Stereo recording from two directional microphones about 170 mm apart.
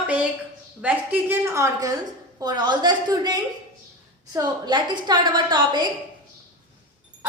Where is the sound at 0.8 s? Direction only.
10° right (ahead or behind); by 5.9 s 25° right (ahead or behind).